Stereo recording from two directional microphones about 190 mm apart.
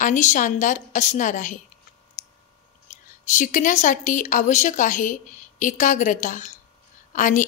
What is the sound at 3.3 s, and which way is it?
A woman's voice, 45° left (ahead or behind).